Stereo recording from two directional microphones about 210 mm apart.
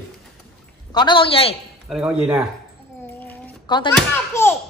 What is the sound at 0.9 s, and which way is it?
Speech, 20° left (ahead or behind).